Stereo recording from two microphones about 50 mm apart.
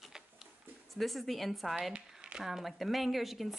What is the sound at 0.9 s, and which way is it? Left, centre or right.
Speech, centre.